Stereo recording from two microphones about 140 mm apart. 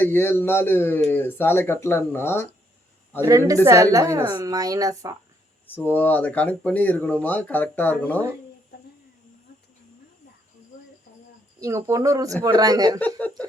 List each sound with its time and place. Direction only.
0.0 s speech: 15° left (ahead or behind)
3.2 s speech: 20° right (ahead or behind)
5.6 s speech: 15° left (ahead or behind)
11.6 s speech: 25° right (ahead or behind)
13.0 s speech: 10° left (ahead or behind)